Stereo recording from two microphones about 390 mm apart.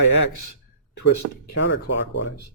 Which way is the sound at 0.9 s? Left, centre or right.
Left.